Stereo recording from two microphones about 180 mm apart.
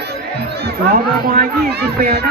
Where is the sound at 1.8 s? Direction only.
60° right (ahead or behind).